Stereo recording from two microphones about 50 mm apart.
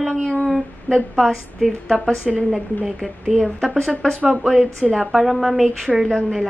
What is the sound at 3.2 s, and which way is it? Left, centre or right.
Speech, centre.